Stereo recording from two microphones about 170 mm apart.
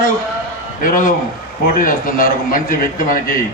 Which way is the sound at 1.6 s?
55° left (ahead or behind).